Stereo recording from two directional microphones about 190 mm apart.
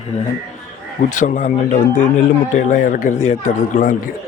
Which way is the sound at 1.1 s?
40° left (ahead or behind).